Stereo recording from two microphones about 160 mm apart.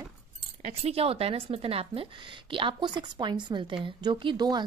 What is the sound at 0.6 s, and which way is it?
A woman's voice, 40° right (ahead or behind).